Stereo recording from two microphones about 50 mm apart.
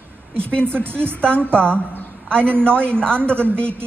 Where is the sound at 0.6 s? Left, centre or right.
Right.